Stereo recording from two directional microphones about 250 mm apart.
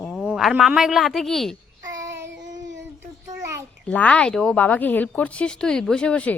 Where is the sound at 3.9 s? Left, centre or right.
Centre.